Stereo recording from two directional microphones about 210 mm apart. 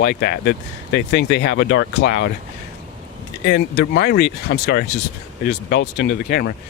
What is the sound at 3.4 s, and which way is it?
Speech, 50° left (ahead or behind).